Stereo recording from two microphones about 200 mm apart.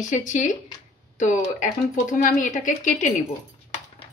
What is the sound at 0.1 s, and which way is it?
Speech, 40° left (ahead or behind).